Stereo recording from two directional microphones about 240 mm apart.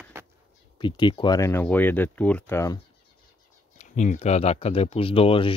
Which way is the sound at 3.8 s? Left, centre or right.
Left.